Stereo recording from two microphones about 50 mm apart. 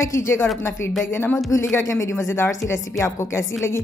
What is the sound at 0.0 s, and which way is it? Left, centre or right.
Speech, left.